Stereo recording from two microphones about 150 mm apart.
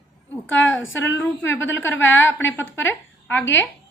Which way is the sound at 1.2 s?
15° left (ahead or behind).